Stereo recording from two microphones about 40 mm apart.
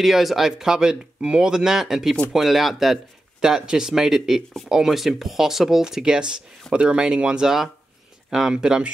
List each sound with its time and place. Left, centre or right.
0.0 s speech: centre
3.3 s speech: centre
7.4 s speech: centre